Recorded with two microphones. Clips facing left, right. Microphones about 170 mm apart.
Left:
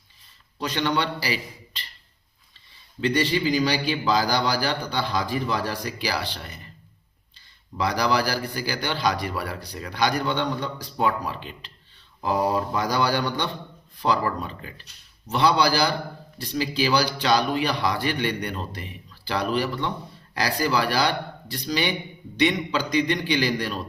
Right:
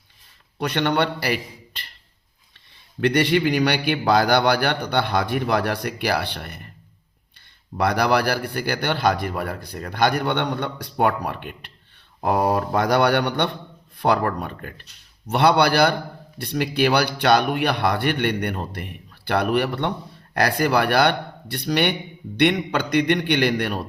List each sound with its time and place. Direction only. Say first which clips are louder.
0.6 s a man's voice: right 4 dB; 60° right (ahead or behind)
3.0 s a man's voice: right 4 dB; 70° right (ahead or behind)
7.8 s a man's voice: right 3 dB; 60° right (ahead or behind)